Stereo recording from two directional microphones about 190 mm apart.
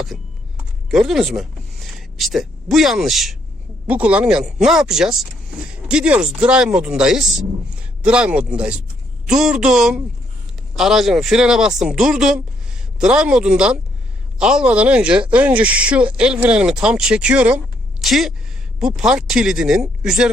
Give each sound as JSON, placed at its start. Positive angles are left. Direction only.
{"t": 0.9, "sound": "speech", "side_deg": 0}